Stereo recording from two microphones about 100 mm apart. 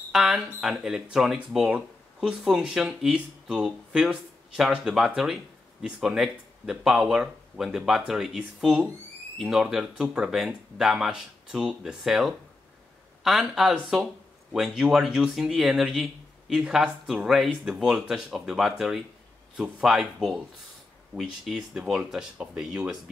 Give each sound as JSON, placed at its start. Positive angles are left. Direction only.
{"t": 0.1, "sound": "speech", "side_deg": -5}